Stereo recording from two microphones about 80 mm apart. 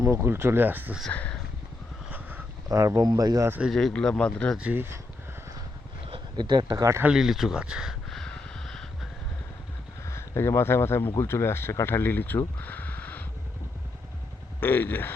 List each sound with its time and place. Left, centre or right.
0.0 s speech: right
1.1 s speech: centre
2.6 s speech: right
3.7 s speech: centre
4.7 s speech: right
6.1 s speech: right
6.7 s speech: right
7.1 s speech: centre
8.1 s a sound: centre
10.0 s speech: left
12.5 s a sound: left
14.6 s speech: left